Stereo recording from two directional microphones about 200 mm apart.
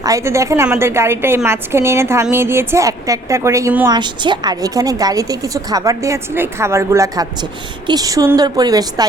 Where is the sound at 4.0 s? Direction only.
25° right (ahead or behind).